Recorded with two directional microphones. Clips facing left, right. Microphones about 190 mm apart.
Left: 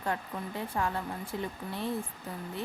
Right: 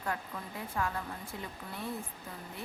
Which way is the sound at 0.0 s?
30° left (ahead or behind).